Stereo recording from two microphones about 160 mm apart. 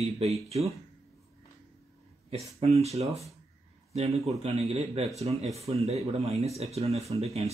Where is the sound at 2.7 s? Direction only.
40° right (ahead or behind).